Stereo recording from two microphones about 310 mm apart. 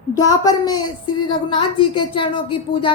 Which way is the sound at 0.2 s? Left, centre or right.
Centre.